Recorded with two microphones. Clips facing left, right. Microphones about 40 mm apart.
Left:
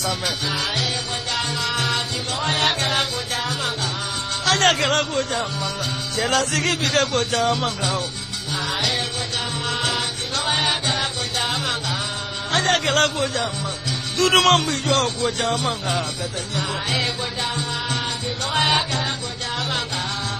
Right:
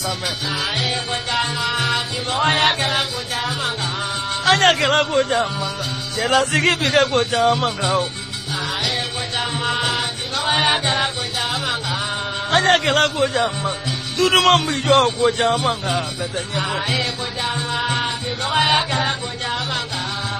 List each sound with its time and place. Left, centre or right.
1.3 s music: centre
4.6 s speech: centre
6.1 s music: centre
6.4 s speech: right
9.7 s music: centre
10.6 s music: right
12.4 s a man's voice: right
14.9 s speech: right
18.5 s music: centre